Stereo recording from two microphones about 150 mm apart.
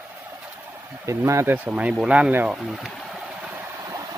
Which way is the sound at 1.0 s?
20° right (ahead or behind).